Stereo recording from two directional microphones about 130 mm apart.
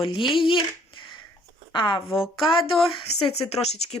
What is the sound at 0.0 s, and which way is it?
Speech, 40° left (ahead or behind).